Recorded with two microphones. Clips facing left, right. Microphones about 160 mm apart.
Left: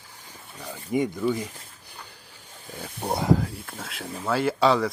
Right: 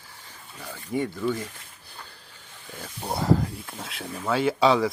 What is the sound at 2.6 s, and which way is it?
Speech, 15° left (ahead or behind).